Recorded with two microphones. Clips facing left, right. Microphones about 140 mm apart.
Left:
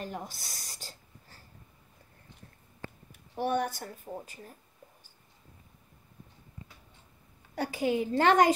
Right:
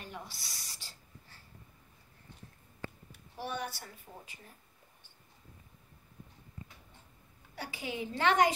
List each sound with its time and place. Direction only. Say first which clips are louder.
0.0 s a sound: left 7 dB; 45° left (ahead or behind)
3.3 s a woman's voice: left 9 dB; 50° left (ahead or behind)
7.5 s a woman's voice: left 11 dB; 45° left (ahead or behind)